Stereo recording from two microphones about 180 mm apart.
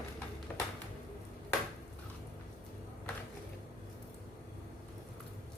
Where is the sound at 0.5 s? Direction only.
10° left (ahead or behind).